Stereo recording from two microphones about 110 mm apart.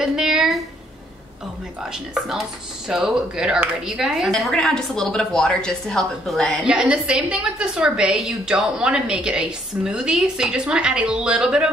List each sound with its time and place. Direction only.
0.0 s a sound: 5° right (ahead or behind)
1.8 s a woman's voice: 5° right (ahead or behind)
6.6 s a woman's voice: 10° right (ahead or behind)